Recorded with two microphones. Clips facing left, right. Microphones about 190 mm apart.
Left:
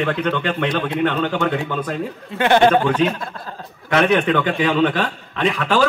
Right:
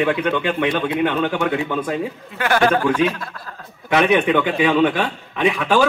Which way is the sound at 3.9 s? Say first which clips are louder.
Right 1 dB; 10° right (ahead or behind).